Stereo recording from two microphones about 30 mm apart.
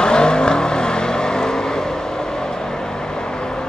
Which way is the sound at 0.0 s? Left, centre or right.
Left.